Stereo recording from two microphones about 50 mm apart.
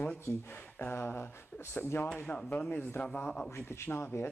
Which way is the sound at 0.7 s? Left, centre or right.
Left.